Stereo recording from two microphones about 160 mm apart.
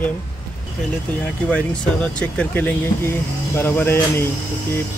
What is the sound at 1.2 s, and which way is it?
Speech, 10° left (ahead or behind).